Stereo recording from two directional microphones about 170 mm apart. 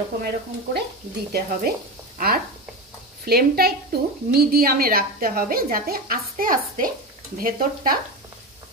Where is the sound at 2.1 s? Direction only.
60° right (ahead or behind).